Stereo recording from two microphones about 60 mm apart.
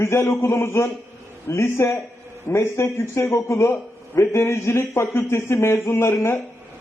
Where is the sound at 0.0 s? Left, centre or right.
Left.